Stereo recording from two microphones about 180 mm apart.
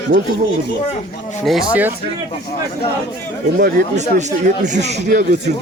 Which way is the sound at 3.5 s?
55° right (ahead or behind).